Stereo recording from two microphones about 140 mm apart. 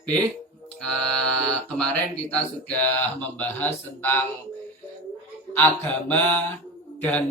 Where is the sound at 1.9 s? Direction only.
10° left (ahead or behind).